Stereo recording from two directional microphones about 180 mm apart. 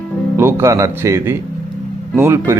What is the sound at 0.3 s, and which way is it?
Speech, 15° right (ahead or behind).